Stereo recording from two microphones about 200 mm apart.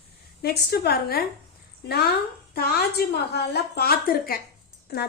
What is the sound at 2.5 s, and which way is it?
A woman's voice, 50° left (ahead or behind).